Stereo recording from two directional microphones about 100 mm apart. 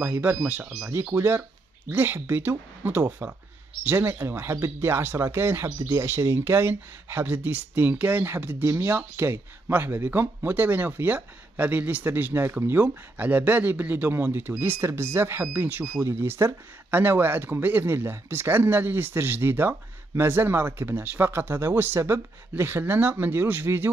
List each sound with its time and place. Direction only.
0.0 s speech: 20° right (ahead or behind)